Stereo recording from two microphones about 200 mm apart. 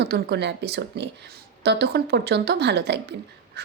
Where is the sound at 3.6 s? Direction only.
55° right (ahead or behind).